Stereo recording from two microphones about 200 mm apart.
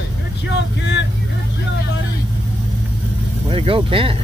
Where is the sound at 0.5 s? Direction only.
60° left (ahead or behind).